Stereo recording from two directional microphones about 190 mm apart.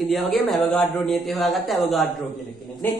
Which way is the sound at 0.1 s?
Centre (ahead or behind).